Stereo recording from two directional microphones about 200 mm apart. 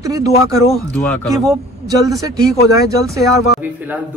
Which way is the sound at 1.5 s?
20° right (ahead or behind).